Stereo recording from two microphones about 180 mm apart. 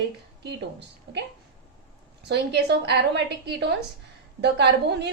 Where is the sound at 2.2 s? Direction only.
70° right (ahead or behind).